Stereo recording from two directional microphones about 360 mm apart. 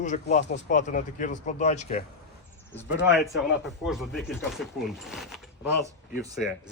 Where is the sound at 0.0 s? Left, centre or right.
Centre.